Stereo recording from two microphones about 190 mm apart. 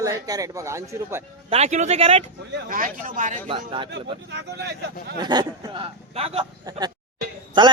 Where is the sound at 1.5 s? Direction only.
35° right (ahead or behind).